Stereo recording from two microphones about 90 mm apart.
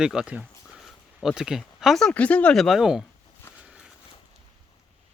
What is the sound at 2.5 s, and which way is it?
Speech, centre (ahead or behind).